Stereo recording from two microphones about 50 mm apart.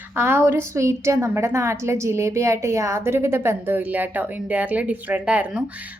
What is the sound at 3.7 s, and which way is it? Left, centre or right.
A woman's voice, right.